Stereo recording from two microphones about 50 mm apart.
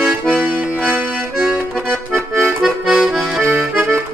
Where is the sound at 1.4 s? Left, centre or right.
Right.